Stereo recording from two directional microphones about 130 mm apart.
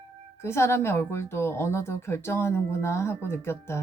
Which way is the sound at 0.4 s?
20° left (ahead or behind).